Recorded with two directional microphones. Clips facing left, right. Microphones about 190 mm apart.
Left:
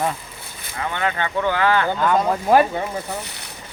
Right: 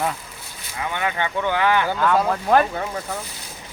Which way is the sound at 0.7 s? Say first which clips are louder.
Left 1 dB; 15° right (ahead or behind).